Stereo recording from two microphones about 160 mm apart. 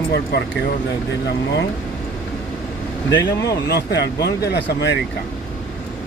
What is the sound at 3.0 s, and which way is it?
Speech, 20° left (ahead or behind).